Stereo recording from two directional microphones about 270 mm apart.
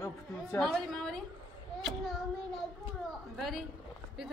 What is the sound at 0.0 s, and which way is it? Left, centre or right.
A woman's voice, centre.